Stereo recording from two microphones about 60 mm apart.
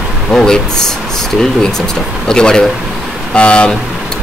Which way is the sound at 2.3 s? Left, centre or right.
Centre.